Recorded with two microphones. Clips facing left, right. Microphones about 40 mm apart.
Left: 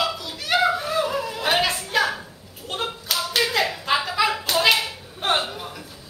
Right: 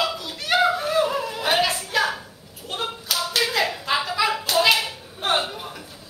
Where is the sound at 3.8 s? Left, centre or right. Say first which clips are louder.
Left 1 dB; centre.